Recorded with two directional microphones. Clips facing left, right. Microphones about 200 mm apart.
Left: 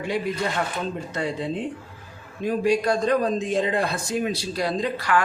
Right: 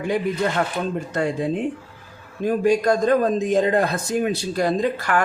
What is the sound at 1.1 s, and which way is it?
Speech, 50° right (ahead or behind).